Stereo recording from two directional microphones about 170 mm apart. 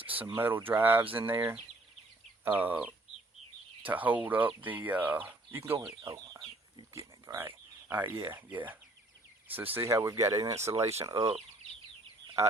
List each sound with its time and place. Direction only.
0.1 s speech: 10° right (ahead or behind)
6.9 s a sound: 15° right (ahead or behind)
8.3 s speech: 10° right (ahead or behind)